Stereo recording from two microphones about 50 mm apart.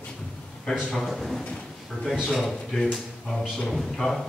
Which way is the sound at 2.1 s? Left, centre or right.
Centre.